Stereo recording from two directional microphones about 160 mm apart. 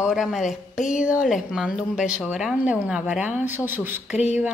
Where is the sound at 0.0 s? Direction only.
5° right (ahead or behind).